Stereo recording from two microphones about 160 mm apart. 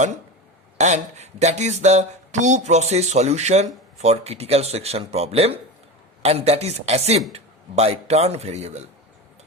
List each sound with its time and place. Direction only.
0.8 s speech: 50° right (ahead or behind)